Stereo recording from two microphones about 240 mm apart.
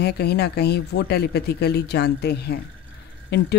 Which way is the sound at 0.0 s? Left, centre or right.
Left.